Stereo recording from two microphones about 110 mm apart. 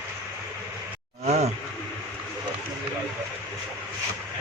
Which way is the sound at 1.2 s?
85° right.